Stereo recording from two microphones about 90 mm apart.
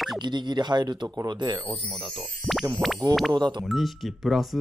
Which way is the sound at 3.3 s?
55° right (ahead or behind).